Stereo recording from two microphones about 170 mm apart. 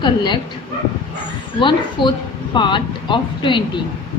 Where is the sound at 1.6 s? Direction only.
30° left (ahead or behind).